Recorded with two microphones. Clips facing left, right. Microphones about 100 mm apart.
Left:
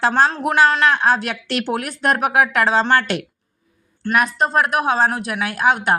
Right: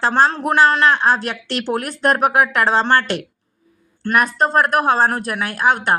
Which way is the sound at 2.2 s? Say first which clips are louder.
Left 1 dB; 30° right (ahead or behind).